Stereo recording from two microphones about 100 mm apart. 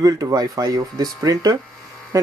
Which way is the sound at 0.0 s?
35° right (ahead or behind).